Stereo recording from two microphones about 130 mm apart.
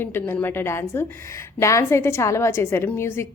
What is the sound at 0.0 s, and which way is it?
A woman's voice, 15° left (ahead or behind).